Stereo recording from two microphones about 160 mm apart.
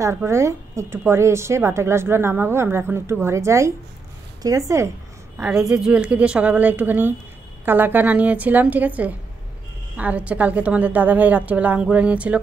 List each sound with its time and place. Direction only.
0.0 s a woman's voice: 15° right (ahead or behind)
5.7 s speech: 5° right (ahead or behind)